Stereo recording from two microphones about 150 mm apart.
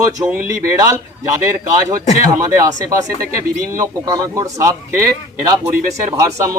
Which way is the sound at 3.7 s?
20° right (ahead or behind).